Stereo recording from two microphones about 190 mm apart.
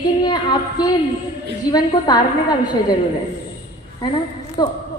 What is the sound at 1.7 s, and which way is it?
Speech, 20° left (ahead or behind).